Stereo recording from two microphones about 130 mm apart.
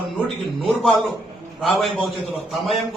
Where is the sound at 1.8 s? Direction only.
Centre (ahead or behind).